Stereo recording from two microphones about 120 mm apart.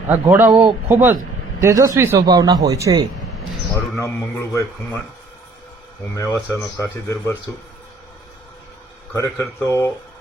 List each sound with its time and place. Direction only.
0.1 s speech: 15° right (ahead or behind)
1.6 s speech: 25° right (ahead or behind)
3.9 s speech: 25° left (ahead or behind)
6.1 s speech: 25° left (ahead or behind)
9.1 s speech: 25° left (ahead or behind)